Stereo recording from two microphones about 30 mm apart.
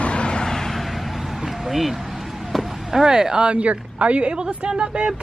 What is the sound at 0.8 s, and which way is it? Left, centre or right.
Vehicle, centre.